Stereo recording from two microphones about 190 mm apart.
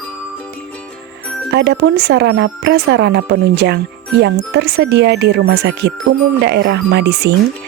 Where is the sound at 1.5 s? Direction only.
65° right (ahead or behind).